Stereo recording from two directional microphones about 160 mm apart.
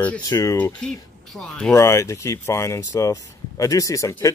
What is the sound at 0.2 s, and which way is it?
Speech, 20° left (ahead or behind).